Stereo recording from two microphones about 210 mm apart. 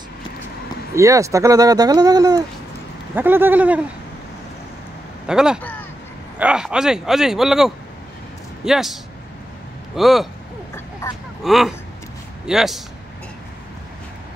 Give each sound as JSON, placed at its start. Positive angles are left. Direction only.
{"t": 0.9, "sound": "speech", "side_deg": -15}
{"t": 5.2, "sound": "speech", "side_deg": -5}
{"t": 5.6, "sound": "a sound", "side_deg": 10}
{"t": 6.3, "sound": "speech", "side_deg": -5}
{"t": 11.0, "sound": "speech", "side_deg": 15}
{"t": 11.4, "sound": "speech", "side_deg": 0}